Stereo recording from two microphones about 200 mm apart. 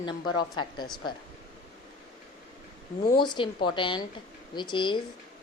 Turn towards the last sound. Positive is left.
turn(degrees=25)  # may be behind; listen again after turning